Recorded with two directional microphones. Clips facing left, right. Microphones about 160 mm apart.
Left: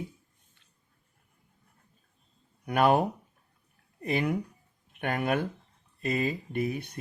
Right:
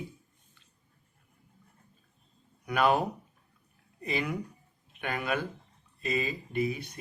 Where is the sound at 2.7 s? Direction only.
55° left (ahead or behind).